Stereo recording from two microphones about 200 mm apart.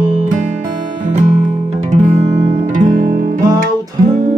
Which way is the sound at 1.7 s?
35° right (ahead or behind).